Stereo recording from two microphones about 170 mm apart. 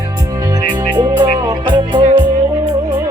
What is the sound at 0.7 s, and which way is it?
Music, 25° right (ahead or behind).